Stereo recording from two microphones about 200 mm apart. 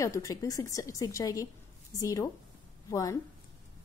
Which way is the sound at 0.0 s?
15° left (ahead or behind).